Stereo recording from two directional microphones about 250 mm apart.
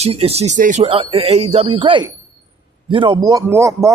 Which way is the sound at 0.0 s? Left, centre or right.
Right.